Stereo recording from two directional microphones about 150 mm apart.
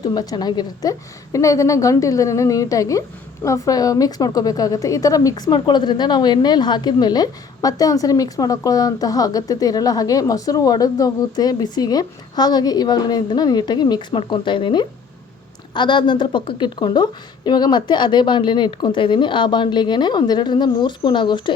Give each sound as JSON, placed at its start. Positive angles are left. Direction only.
{"t": 0.0, "sound": "a woman's voice", "side_deg": 25}